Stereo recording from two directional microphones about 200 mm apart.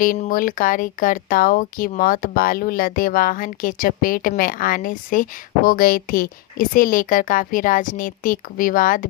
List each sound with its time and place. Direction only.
0.0 s speech: 45° left (ahead or behind)